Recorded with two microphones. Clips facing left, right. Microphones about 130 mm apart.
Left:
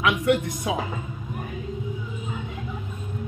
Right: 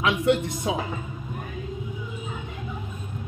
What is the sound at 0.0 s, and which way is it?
Speech, 25° right (ahead or behind).